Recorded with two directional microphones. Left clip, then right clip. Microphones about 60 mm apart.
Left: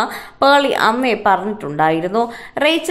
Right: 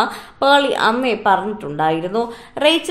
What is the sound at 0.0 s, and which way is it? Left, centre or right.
A woman's voice, left.